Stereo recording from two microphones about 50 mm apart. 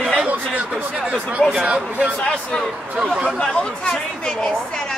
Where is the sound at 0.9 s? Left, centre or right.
Right.